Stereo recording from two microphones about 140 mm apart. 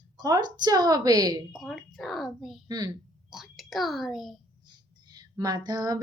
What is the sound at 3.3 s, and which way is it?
A child's voice, centre (ahead or behind).